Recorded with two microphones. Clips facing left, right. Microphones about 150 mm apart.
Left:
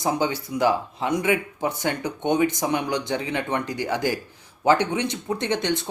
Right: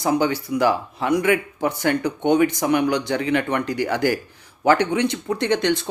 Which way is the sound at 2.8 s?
70° right (ahead or behind).